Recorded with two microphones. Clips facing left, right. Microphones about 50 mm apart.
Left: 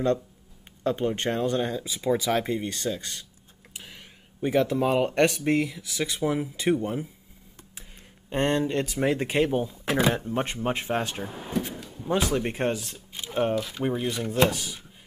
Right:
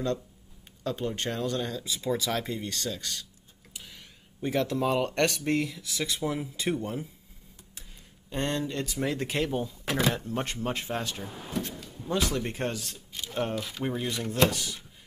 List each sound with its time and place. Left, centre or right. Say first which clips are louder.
0.8 s speech: left 5 dB; left
8.3 s speech: left 6 dB; left
11.3 s speech: left 5 dB; centre